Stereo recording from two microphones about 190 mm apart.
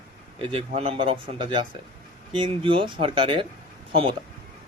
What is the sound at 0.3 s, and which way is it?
A man's voice, 30° right (ahead or behind).